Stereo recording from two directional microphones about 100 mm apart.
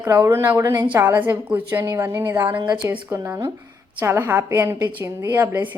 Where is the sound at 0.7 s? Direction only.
50° right (ahead or behind).